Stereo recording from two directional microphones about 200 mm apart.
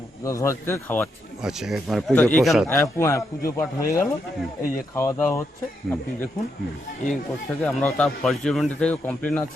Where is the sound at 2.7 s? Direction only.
15° left (ahead or behind).